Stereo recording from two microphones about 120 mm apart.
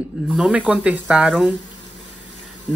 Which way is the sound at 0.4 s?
10° right (ahead or behind).